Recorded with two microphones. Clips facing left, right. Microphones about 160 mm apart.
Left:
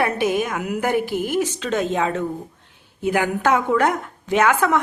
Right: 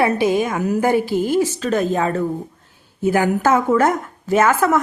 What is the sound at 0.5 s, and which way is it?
Speech, 30° right (ahead or behind).